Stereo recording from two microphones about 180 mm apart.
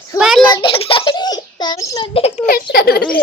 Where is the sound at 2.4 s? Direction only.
55° left (ahead or behind).